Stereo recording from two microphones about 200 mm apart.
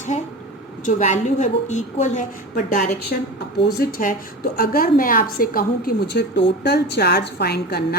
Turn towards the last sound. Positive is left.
turn(degrees=55)  # may be behind; listen again after turning